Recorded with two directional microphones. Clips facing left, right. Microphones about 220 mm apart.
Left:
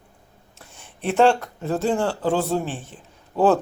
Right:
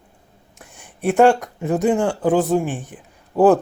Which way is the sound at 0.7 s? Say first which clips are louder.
Right 4 dB; 15° right (ahead or behind).